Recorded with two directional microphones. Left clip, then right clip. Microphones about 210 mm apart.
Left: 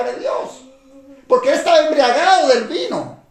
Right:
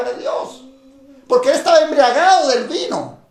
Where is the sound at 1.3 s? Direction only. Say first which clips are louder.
Right 1 dB; 40° right (ahead or behind).